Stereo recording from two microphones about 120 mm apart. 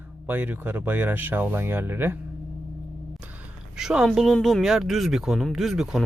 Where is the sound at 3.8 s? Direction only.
5° right (ahead or behind).